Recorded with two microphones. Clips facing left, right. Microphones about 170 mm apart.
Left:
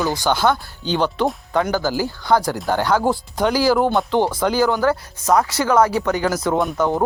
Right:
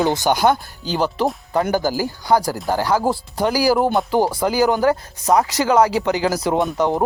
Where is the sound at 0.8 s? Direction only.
5° right (ahead or behind).